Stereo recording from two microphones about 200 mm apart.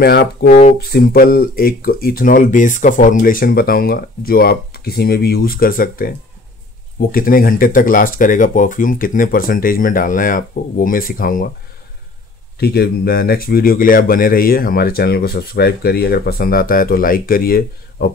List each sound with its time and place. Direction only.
0.0 s speech: 50° left (ahead or behind)
12.5 s speech: 55° left (ahead or behind)